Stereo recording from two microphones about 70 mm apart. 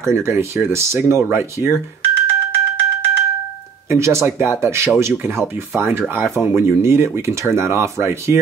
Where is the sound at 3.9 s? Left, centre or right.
Right.